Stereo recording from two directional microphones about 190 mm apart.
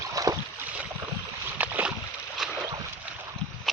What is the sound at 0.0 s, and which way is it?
Boat, 20° right (ahead or behind).